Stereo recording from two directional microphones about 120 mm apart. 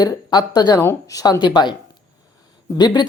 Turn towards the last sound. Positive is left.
turn(degrees=35)  # may be behind; listen again after turning